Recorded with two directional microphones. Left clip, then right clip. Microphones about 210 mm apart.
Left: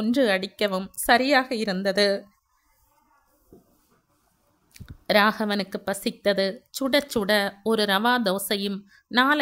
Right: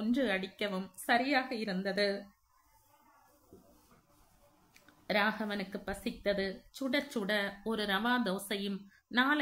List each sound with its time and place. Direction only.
0.0 s speech: 50° left (ahead or behind)
4.7 s speech: 55° left (ahead or behind)